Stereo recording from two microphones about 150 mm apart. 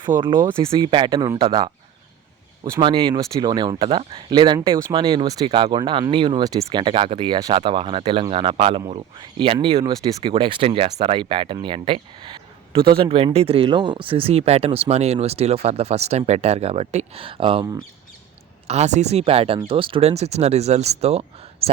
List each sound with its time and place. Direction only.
0.1 s speech: 15° right (ahead or behind)
0.6 s speech: 30° right (ahead or behind)
2.8 s speech: 30° right (ahead or behind)
9.8 s speech: 25° right (ahead or behind)
18.7 s speech: 50° right (ahead or behind)